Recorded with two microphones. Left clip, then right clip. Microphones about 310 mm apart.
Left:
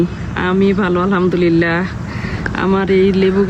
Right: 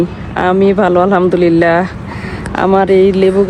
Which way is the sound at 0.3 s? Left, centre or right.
Centre.